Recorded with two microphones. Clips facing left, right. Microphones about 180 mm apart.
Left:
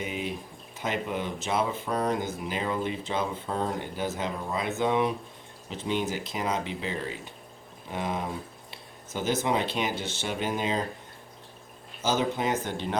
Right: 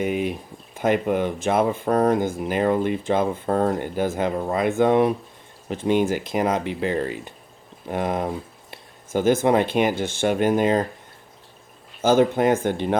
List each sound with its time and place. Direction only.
0.0 s speech: 55° right (ahead or behind)
12.0 s speech: 55° right (ahead or behind)